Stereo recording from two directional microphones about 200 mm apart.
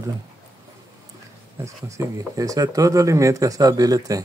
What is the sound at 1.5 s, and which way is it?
Speech, 15° right (ahead or behind).